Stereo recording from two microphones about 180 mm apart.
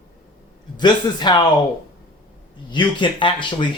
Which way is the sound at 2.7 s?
25° left (ahead or behind).